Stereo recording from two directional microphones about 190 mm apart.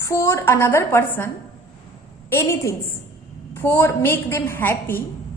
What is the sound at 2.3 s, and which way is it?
A woman's voice, 15° left (ahead or behind).